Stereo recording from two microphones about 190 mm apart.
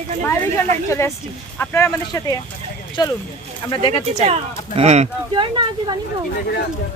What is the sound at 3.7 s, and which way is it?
Speech, 25° left (ahead or behind).